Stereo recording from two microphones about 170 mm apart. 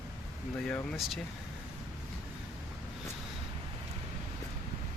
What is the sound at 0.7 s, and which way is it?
Speech, centre (ahead or behind).